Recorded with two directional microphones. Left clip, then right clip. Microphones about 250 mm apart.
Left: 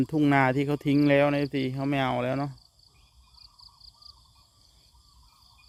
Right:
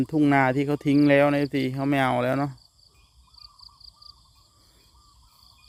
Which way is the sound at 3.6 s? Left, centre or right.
Centre.